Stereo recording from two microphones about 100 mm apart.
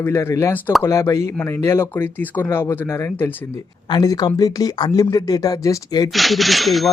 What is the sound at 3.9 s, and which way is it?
Speech, 40° left (ahead or behind).